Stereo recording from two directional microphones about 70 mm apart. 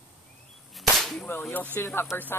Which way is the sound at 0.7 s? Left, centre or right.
Centre.